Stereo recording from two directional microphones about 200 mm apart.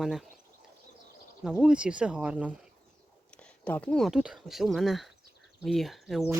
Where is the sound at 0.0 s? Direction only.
Centre (ahead or behind).